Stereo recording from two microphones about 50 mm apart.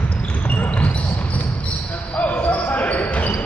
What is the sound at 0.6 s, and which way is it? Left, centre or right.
Basketball bounce, left.